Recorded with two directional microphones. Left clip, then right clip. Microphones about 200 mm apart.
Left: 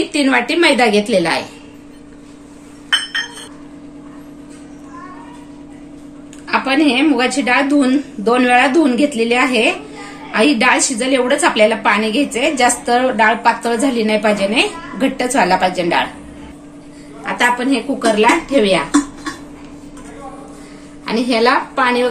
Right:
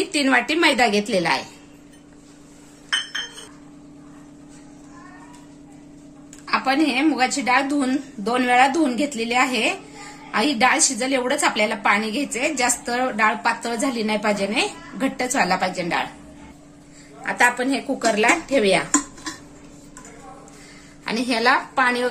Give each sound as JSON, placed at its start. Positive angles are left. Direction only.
{"t": 0.1, "sound": "a woman's voice", "side_deg": -45}
{"t": 6.4, "sound": "a woman's voice", "side_deg": -50}
{"t": 17.2, "sound": "a woman's voice", "side_deg": -45}
{"t": 21.0, "sound": "a woman's voice", "side_deg": -40}